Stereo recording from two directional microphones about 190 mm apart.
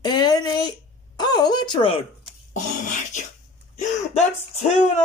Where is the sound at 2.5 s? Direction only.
40° left (ahead or behind).